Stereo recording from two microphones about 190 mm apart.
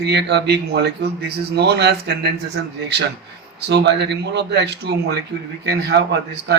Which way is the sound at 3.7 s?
65° right (ahead or behind).